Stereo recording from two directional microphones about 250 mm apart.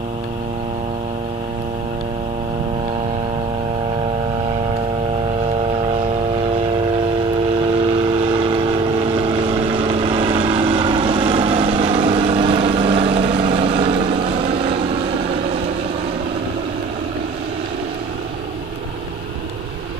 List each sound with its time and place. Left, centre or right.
9.0 s vehicle: right